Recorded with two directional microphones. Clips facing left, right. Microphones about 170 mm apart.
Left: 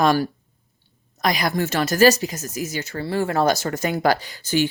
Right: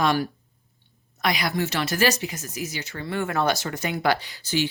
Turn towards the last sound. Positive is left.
turn(degrees=50)  # may be behind; listen again after turning